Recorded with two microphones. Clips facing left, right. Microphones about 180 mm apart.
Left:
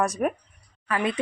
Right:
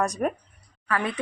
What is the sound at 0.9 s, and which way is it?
Speech, 15° left (ahead or behind).